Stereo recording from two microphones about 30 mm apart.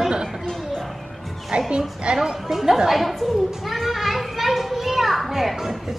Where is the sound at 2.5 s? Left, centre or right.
Centre.